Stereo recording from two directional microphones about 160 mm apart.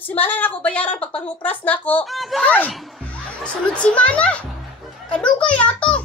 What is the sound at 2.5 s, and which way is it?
A child's voice, 10° left (ahead or behind).